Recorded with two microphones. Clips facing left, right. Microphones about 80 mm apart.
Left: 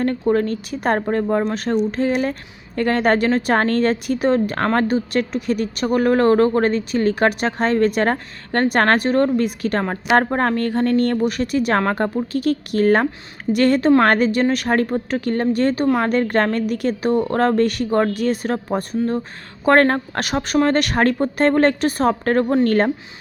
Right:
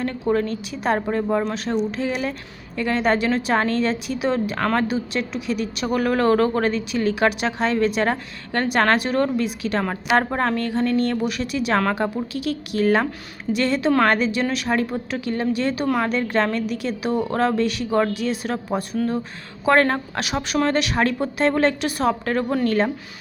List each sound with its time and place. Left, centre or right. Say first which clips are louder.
0.3 s a woman's voice: left 3 dB; left
1.1 s a woman's voice: left 3 dB; left
9.8 s speech: left 3 dB; left
10.3 s a woman's voice: left 3 dB; left